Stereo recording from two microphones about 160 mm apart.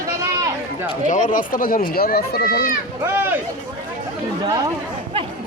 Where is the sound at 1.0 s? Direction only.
50° left (ahead or behind).